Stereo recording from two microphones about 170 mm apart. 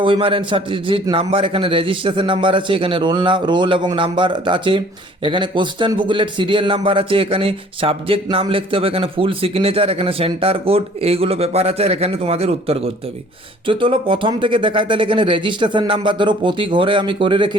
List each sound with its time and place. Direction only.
0.0 s a man's voice: 30° right (ahead or behind)